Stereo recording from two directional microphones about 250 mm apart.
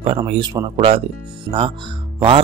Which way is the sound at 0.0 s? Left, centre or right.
Right.